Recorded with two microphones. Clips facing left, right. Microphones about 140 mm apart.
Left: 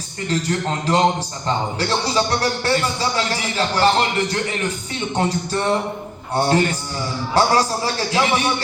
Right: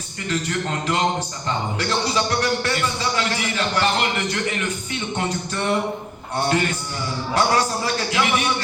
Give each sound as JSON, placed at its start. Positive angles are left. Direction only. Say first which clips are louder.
{"t": 0.3, "sound": "a man's voice", "louder": "left 3 dB", "side_deg": 35}
{"t": 7.3, "sound": "a man's voice", "louder": "left 3 dB", "side_deg": 35}